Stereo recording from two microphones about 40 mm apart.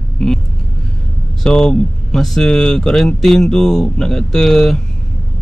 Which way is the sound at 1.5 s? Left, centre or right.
Left.